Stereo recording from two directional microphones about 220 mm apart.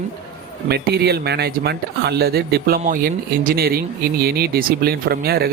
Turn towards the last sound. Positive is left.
turn(degrees=-45)  # may be behind; listen again after turning